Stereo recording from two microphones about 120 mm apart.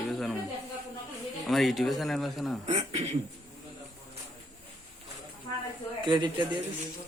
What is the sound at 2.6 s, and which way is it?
Speech, 65° right (ahead or behind).